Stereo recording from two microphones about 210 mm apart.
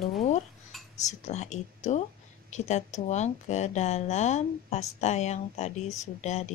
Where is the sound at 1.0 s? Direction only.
35° left (ahead or behind).